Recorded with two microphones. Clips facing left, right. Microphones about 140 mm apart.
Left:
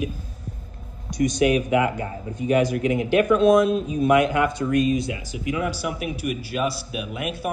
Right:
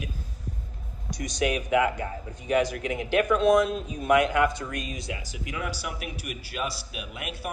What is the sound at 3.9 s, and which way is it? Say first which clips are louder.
Speech: left 2 dB; 25° left (ahead or behind).